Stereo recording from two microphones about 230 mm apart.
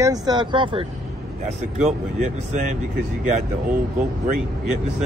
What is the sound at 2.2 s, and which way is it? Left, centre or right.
Speech, right.